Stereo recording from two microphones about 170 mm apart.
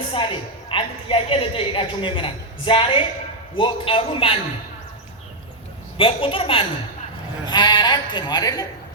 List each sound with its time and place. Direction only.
0.1 s a woman's voice: 30° left (ahead or behind)
6.0 s a woman's voice: 35° left (ahead or behind)